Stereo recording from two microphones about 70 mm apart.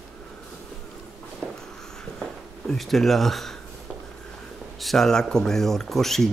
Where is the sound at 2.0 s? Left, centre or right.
Centre.